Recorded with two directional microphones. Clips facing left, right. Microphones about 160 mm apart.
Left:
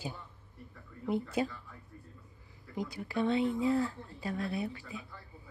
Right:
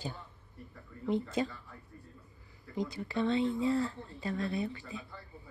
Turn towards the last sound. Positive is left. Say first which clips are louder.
# right 1 dB
turn(degrees=10)  # may be behind; listen again after turning